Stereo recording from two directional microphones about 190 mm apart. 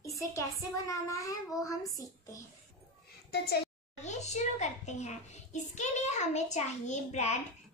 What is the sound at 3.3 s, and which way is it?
Speech, 55° left (ahead or behind).